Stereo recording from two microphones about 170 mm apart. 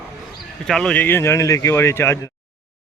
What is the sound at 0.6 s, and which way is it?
Speech, 5° left (ahead or behind).